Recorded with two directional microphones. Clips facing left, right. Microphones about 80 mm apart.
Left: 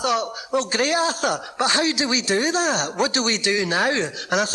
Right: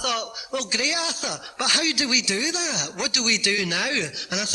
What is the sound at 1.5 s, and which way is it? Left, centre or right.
A man's voice, left.